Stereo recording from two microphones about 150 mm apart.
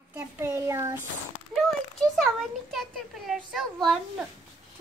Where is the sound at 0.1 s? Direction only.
15° right (ahead or behind).